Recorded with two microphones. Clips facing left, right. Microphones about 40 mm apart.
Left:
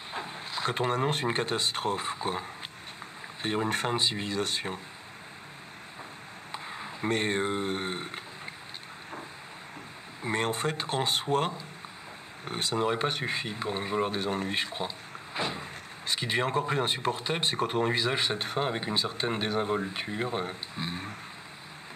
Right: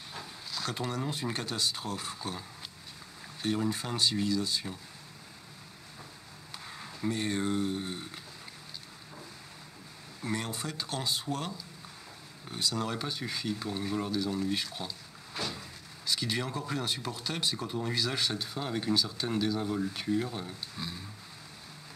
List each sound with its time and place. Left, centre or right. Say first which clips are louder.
0.1 s vehicle: left 6 dB; left
1.3 s speech: left 5 dB; left
3.4 s speech: left 3 dB; left
4.4 s speech: left 3 dB; left
6.5 s a sound: left 6 dB; left
7.1 s speech: left 3 dB; left
10.3 s speech: left 7 dB; left
12.7 s speech: left 6 dB; left
17.8 s speech: left 4 dB; left
18.4 s speech: left 7 dB; left
18.7 s speech: even; left